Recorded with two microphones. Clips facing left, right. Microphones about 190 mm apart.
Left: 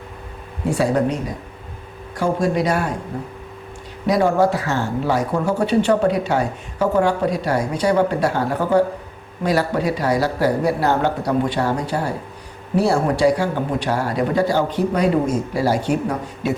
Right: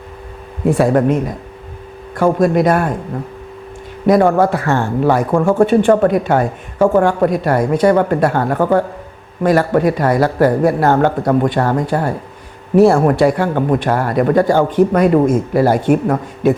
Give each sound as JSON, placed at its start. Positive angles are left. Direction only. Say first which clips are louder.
{"t": 0.7, "sound": "speech", "louder": "right 6 dB", "side_deg": -55}
{"t": 4.0, "sound": "speech", "louder": "right 5 dB", "side_deg": -55}